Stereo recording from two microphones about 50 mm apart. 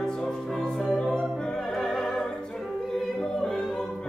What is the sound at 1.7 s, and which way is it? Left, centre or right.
Music, centre.